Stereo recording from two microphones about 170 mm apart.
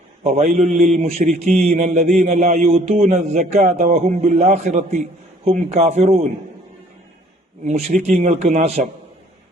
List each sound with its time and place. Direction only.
0.4 s a man's voice: 45° right (ahead or behind)
7.7 s a man's voice: 40° right (ahead or behind)